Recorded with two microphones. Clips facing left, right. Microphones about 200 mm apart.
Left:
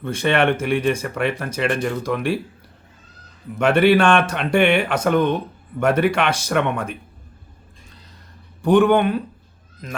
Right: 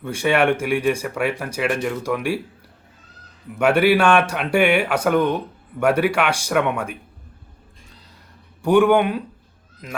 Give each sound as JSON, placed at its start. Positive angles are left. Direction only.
{"t": 0.0, "sound": "speech", "side_deg": -10}
{"t": 3.6, "sound": "speech", "side_deg": -10}
{"t": 8.6, "sound": "speech", "side_deg": -10}